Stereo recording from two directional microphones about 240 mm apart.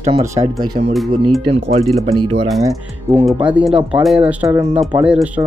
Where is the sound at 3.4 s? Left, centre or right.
Centre.